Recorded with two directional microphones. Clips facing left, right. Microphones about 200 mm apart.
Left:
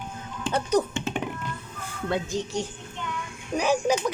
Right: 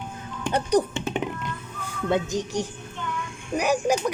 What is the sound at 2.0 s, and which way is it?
Speech, 20° right (ahead or behind).